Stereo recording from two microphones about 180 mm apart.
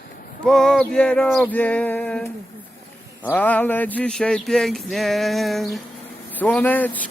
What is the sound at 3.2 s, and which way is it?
Speech, 10° left (ahead or behind).